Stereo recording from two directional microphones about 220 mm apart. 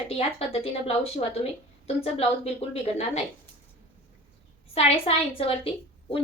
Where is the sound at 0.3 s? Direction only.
25° left (ahead or behind).